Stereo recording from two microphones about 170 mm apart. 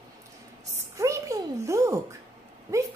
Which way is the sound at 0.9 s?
20° right (ahead or behind).